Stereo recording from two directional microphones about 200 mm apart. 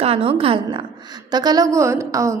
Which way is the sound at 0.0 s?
30° right (ahead or behind).